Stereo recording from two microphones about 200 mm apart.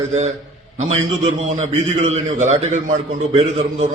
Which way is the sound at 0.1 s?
35° right (ahead or behind).